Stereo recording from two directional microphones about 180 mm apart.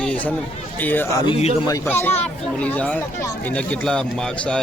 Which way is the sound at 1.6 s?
15° left (ahead or behind).